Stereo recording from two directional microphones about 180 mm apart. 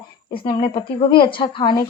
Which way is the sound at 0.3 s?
25° left (ahead or behind).